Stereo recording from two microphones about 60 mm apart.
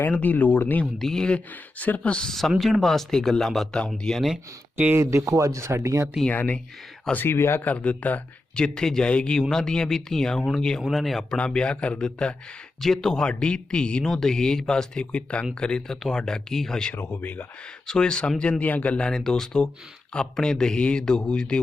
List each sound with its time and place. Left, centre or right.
0.1 s speech: left
0.9 s speech: centre
1.8 s speech: left
2.1 s speech: centre
4.9 s speech: right
6.3 s speech: left
7.3 s speech: left
7.6 s speech: left
8.5 s speech: centre
9.4 s speech: centre
11.3 s speech: centre
16.9 s speech: left
17.8 s speech: centre